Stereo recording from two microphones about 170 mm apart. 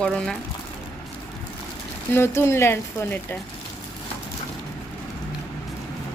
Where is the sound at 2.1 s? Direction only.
15° left (ahead or behind).